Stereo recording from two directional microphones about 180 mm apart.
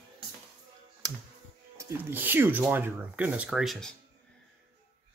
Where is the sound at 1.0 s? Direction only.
20° right (ahead or behind).